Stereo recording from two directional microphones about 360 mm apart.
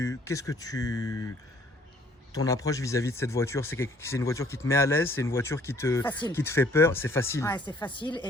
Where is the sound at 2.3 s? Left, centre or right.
Centre.